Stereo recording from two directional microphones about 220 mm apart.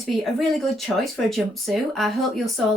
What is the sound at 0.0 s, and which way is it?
Speech, centre (ahead or behind).